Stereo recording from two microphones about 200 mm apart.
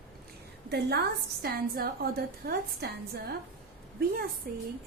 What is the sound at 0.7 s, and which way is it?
A woman's voice, 55° right (ahead or behind).